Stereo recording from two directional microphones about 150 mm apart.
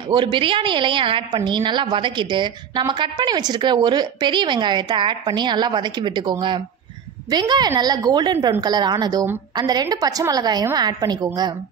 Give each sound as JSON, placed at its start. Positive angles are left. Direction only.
{"t": 0.1, "sound": "a woman's voice", "side_deg": -30}